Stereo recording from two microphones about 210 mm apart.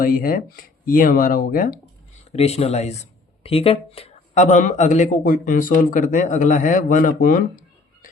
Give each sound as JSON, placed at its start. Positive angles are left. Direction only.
{"t": 0.0, "sound": "speech", "side_deg": 45}
{"t": 2.2, "sound": "speech", "side_deg": 30}